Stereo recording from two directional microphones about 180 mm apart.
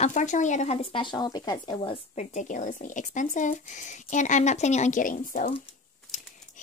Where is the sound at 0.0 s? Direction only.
45° left (ahead or behind).